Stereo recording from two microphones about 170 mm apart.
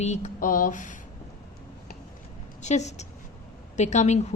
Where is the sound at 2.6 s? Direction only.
45° left (ahead or behind).